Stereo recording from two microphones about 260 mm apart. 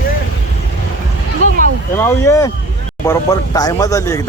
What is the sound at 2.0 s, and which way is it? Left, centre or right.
Speech, centre.